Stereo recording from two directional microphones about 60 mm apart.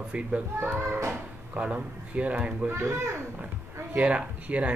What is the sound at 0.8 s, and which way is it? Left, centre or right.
Speech, right.